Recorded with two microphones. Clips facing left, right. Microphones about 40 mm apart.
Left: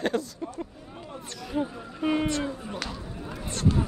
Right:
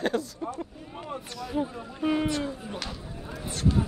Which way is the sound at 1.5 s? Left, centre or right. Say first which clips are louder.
Left 1 dB; centre.